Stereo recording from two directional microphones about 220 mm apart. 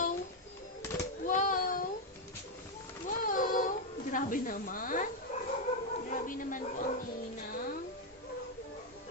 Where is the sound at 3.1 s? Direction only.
40° left (ahead or behind).